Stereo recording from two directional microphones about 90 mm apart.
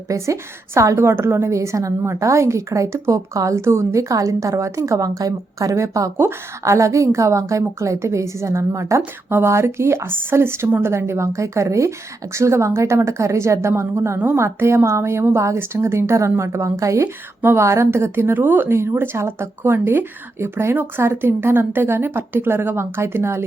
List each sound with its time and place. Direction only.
0.1 s a woman's voice: 35° right (ahead or behind)